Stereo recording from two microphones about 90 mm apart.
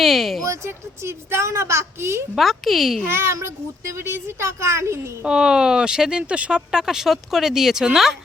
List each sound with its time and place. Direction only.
0.0 s speech: centre (ahead or behind)
0.4 s a woman's voice: 30° right (ahead or behind)
2.3 s speech: centre (ahead or behind)
3.1 s a woman's voice: 25° right (ahead or behind)
5.2 s speech: 10° right (ahead or behind)